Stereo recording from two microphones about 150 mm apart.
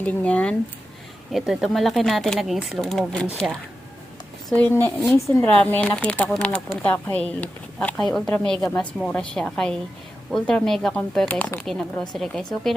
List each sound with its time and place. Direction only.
0.0 s speech: 10° left (ahead or behind)
1.3 s a woman's voice: centre (ahead or behind); by 5.5 s 20° left (ahead or behind)
5.5 s speech: 10° left (ahead or behind)